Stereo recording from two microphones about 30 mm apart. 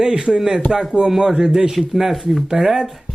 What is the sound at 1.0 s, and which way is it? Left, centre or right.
A man's voice, centre.